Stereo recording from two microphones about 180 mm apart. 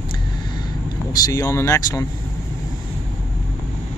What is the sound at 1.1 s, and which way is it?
Speech, 20° left (ahead or behind).